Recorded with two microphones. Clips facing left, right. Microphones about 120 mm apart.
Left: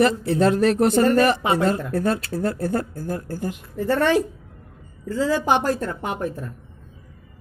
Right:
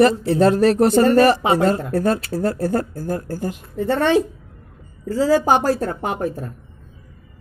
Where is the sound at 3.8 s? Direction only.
25° right (ahead or behind).